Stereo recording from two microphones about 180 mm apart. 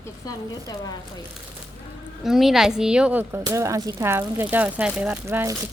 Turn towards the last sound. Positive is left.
turn(degrees=-15)  # may be behind; listen again after turning